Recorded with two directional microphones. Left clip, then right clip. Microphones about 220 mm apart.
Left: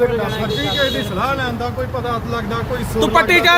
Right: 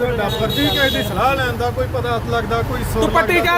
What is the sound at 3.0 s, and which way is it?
Speech, 40° left (ahead or behind).